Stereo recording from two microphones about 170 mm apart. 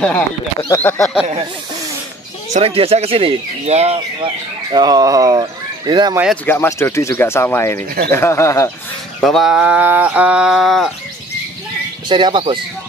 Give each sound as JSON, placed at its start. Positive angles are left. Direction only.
{"t": 0.7, "sound": "speech", "side_deg": 10}
{"t": 2.5, "sound": "speech", "side_deg": -35}
{"t": 4.7, "sound": "speech", "side_deg": -25}
{"t": 6.4, "sound": "speech", "side_deg": 15}
{"t": 9.2, "sound": "a sound", "side_deg": 0}
{"t": 12.1, "sound": "speech", "side_deg": -25}